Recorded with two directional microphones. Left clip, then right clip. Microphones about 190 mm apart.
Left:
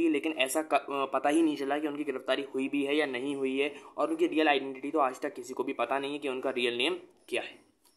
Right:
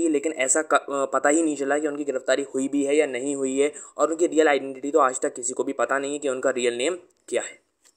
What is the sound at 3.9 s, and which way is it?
Speech, 35° right (ahead or behind).